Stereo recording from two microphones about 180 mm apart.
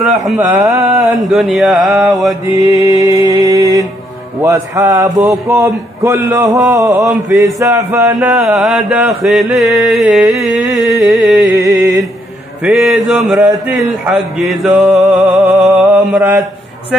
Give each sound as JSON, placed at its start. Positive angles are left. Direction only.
{"t": 0.0, "sound": "music", "side_deg": 0}
{"t": 0.5, "sound": "speech", "side_deg": -15}
{"t": 0.8, "sound": "music", "side_deg": 0}
{"t": 2.1, "sound": "mantra", "side_deg": -20}
{"t": 3.5, "sound": "speech", "side_deg": -20}
{"t": 8.3, "sound": "music", "side_deg": -5}
{"t": 11.6, "sound": "mantra", "side_deg": -20}
{"t": 12.6, "sound": "music", "side_deg": 0}